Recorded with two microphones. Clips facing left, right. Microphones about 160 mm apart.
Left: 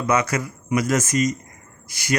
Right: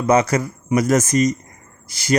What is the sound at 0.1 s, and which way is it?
Speech, 35° right (ahead or behind).